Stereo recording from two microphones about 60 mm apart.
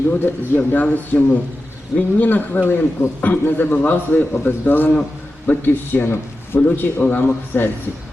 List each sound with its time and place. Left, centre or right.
0.2 s a man's voice: left
6.6 s speech: left